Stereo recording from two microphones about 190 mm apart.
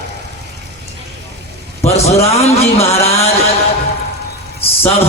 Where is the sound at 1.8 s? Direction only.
35° left (ahead or behind).